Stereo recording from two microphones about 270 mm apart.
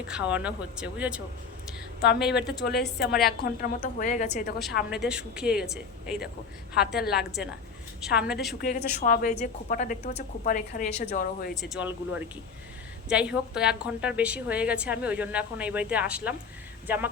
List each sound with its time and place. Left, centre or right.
0.1 s a woman's voice: centre
2.0 s a woman's voice: left
4.9 s a woman's voice: centre
6.7 s a woman's voice: left
7.2 s a woman's voice: centre
8.6 s a woman's voice: left
11.5 s a woman's voice: centre